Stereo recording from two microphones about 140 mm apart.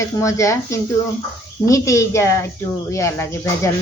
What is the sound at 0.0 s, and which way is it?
A woman's voice, 20° left (ahead or behind).